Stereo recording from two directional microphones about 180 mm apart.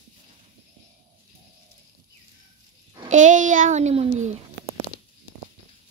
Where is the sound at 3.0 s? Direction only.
45° right (ahead or behind).